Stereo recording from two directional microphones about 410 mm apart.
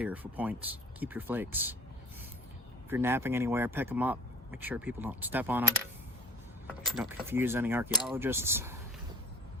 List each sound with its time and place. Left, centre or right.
0.0 s speech: centre
2.9 s speech: centre